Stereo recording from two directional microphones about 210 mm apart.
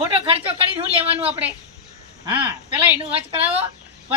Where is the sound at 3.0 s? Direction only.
25° right (ahead or behind).